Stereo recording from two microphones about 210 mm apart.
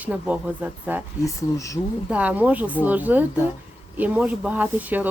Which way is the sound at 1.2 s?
15° left (ahead or behind).